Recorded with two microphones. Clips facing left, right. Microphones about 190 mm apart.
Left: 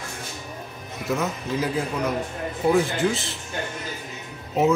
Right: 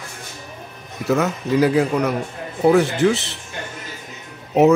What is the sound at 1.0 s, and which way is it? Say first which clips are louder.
A man's voice: right 7 dB; 70° right (ahead or behind).